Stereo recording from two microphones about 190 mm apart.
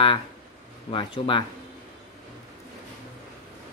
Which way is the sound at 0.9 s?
25° left (ahead or behind).